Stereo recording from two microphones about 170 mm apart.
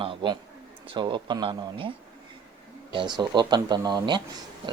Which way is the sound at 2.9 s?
25° right (ahead or behind).